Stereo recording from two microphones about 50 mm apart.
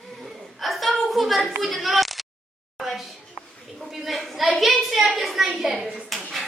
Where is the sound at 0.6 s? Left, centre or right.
Centre.